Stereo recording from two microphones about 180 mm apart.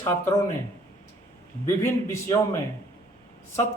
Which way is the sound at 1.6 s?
15° left (ahead or behind).